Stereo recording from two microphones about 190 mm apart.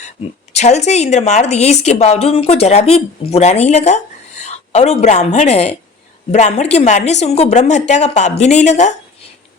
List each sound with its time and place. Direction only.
0.5 s a woman's voice: 35° left (ahead or behind)